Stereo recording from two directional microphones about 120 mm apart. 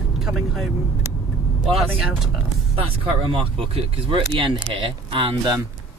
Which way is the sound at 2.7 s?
55° right (ahead or behind).